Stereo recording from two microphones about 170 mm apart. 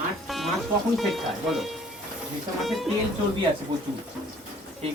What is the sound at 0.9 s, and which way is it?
Speech, centre (ahead or behind).